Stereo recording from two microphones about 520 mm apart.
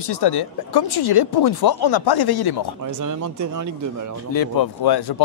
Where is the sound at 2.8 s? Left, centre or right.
Right.